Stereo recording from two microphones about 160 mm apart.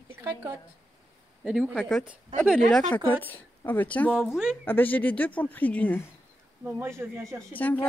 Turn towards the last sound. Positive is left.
turn(degrees=10)  # may be behind; listen again after turning